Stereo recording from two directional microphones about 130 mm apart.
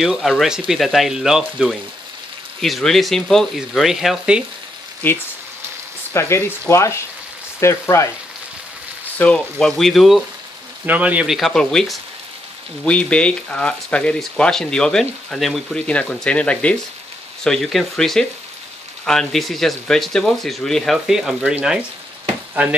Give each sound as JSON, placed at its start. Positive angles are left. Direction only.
{"t": 0.0, "sound": "speech", "side_deg": 0}
{"t": 5.0, "sound": "speech", "side_deg": 15}
{"t": 9.2, "sound": "speech", "side_deg": 10}
{"t": 10.9, "sound": "speech", "side_deg": -10}